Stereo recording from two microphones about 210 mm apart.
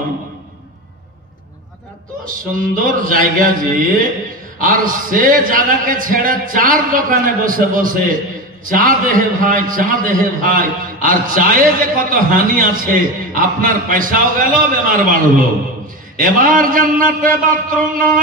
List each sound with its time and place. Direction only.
2.2 s a man's voice: 40° right (ahead or behind)
16.3 s a man's voice: 40° right (ahead or behind)